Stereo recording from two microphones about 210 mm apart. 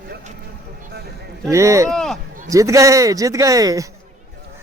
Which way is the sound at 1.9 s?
Centre (ahead or behind).